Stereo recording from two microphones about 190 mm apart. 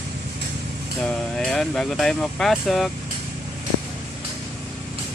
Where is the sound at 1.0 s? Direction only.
Centre (ahead or behind).